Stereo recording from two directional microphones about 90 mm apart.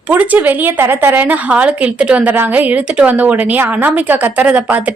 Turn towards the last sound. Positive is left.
turn(degrees=-15)  # may be behind; listen again after turning